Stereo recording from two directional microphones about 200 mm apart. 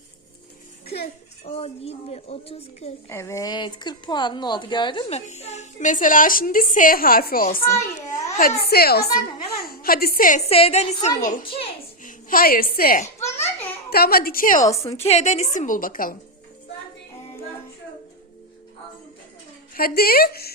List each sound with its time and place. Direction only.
1.5 s speech: 30° left (ahead or behind)
3.1 s a woman's voice: 15° left (ahead or behind); by 13.1 s 45° left (ahead or behind)
13.1 s a sound: 10° left (ahead or behind)
13.9 s a woman's voice: 50° left (ahead or behind)
19.7 s a woman's voice: 50° left (ahead or behind)